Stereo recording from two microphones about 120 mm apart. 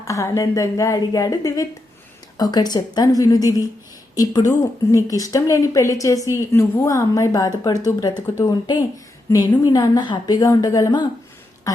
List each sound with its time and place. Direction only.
0.0 s a woman's voice: 25° left (ahead or behind)